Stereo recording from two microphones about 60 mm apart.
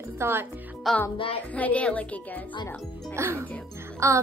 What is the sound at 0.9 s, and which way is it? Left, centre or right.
Music, centre.